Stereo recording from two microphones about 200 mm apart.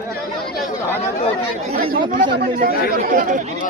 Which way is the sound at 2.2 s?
45° right (ahead or behind).